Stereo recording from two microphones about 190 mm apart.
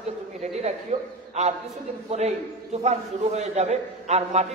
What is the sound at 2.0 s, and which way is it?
A man's voice, 35° right (ahead or behind).